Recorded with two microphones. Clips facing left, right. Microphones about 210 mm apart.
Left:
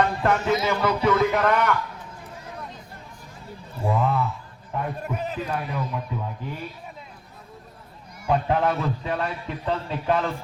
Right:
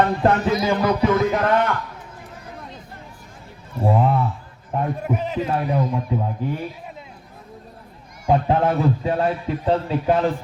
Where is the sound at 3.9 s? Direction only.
30° right (ahead or behind).